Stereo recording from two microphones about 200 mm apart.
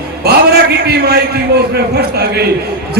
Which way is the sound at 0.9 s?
55° right (ahead or behind).